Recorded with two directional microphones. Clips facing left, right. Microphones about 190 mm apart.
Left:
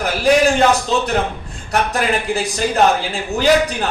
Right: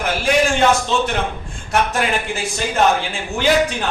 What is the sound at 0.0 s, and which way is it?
A man's voice, 35° left (ahead or behind).